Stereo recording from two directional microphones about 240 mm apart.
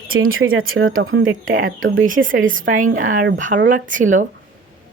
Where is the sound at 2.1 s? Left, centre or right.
Right.